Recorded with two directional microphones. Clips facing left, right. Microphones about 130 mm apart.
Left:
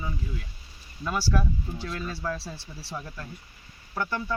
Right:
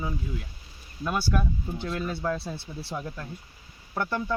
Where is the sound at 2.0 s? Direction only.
20° right (ahead or behind).